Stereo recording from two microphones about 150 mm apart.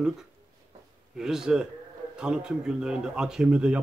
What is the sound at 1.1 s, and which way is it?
Speech, 5° right (ahead or behind).